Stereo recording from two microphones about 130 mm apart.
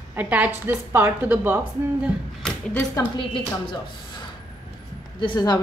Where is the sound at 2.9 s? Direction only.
35° left (ahead or behind).